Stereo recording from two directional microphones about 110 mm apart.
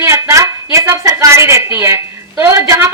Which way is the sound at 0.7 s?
25° right (ahead or behind).